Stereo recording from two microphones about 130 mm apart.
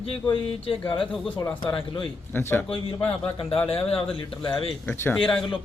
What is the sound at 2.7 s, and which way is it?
Speech, 45° left (ahead or behind).